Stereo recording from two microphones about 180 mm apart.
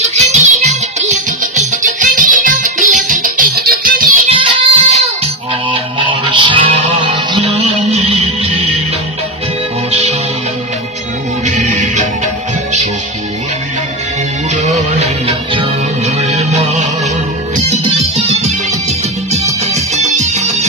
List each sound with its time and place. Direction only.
0.1 s music: 40° right (ahead or behind)
4.3 s music: 30° right (ahead or behind)
9.8 s music: 35° right (ahead or behind)
11.4 s music: 40° right (ahead or behind)
14.5 s music: 40° right (ahead or behind)
18.1 s music: 40° right (ahead or behind)